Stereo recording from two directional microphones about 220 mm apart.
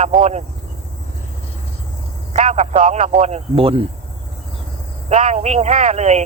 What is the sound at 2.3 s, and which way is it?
Speech, 30° right (ahead or behind).